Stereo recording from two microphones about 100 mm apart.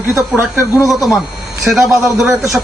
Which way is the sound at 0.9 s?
Centre (ahead or behind).